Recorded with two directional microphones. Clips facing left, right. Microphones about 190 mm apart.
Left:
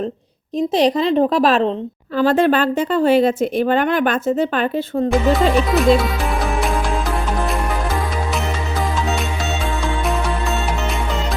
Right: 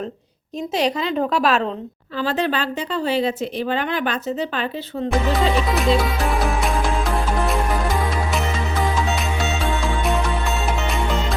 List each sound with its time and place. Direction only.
0.7 s a woman's voice: 35° left (ahead or behind)
2.1 s speech: 50° left (ahead or behind)
5.3 s speech: centre (ahead or behind)
9.8 s music: centre (ahead or behind)